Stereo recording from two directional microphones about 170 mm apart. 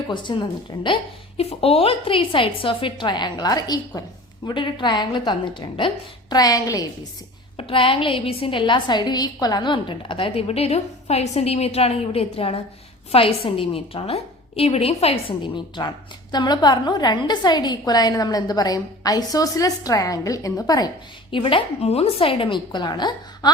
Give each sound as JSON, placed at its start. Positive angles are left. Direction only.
{"t": 0.1, "sound": "a woman's voice", "side_deg": 25}
{"t": 1.4, "sound": "a woman's voice", "side_deg": 35}
{"t": 7.5, "sound": "a woman's voice", "side_deg": 30}